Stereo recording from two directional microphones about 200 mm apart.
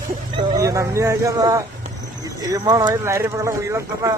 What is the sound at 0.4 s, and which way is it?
Speech, 20° right (ahead or behind).